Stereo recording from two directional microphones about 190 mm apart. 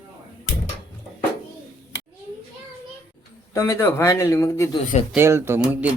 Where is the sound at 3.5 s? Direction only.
15° left (ahead or behind).